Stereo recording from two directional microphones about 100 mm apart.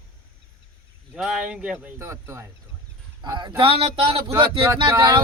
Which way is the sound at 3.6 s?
70° right (ahead or behind).